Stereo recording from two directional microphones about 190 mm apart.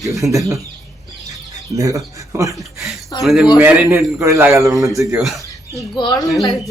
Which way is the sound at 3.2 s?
Centre (ahead or behind).